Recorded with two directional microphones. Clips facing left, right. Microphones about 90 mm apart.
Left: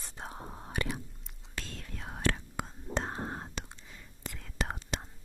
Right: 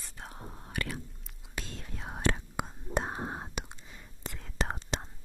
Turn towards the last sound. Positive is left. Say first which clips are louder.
# right 2 dB
turn(degrees=-30)  # may be behind; listen again after turning